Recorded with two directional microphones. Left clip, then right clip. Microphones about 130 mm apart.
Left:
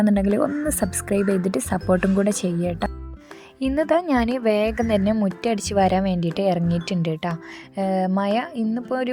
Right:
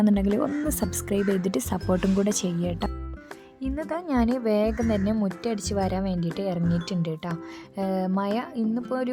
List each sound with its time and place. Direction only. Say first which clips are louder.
0.0 s speech: left 4 dB; 10° left (ahead or behind)
3.6 s a woman's voice: left 11 dB; 45° left (ahead or behind); by 9.1 s 20° left (ahead or behind)